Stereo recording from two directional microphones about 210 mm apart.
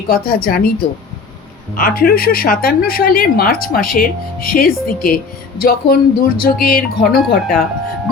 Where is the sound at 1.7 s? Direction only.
45° left (ahead or behind).